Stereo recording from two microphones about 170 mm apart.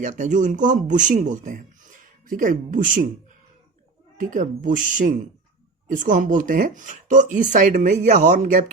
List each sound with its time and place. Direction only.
0.0 s a man's voice: 50° right (ahead or behind)
4.2 s a man's voice: 50° right (ahead or behind)